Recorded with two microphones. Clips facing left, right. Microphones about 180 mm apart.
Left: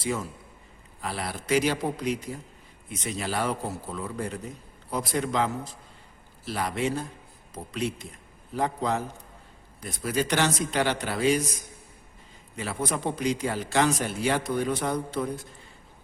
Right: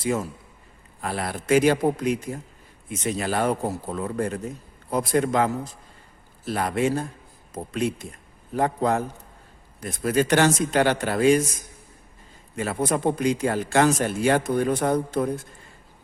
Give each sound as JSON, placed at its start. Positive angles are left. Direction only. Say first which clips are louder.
{"t": 1.0, "sound": "speech", "louder": "right 5 dB", "side_deg": -50}
{"t": 12.5, "sound": "speech", "louder": "right 6 dB", "side_deg": -50}